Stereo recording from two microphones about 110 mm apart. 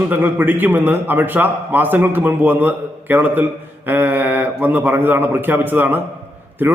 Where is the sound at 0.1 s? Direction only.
15° right (ahead or behind).